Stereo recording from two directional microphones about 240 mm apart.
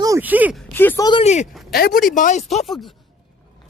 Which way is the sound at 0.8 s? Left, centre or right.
Centre.